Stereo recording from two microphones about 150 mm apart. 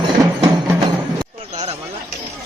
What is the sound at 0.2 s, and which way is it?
Music, 20° right (ahead or behind).